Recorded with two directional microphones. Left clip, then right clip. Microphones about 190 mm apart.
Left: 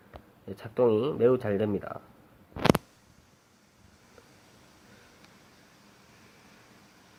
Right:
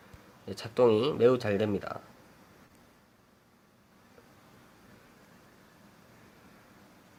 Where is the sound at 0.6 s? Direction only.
5° right (ahead or behind).